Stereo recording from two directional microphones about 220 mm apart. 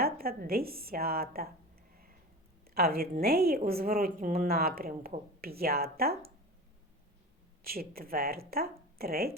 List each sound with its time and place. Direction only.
0.0 s a woman's voice: 45° right (ahead or behind)
2.7 s a woman's voice: 45° right (ahead or behind)
7.6 s a woman's voice: 45° right (ahead or behind)